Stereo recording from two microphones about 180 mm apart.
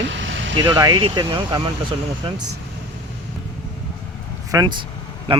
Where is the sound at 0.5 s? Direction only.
20° right (ahead or behind).